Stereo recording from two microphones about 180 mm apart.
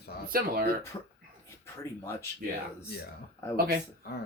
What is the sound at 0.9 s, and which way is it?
Speech, 20° left (ahead or behind).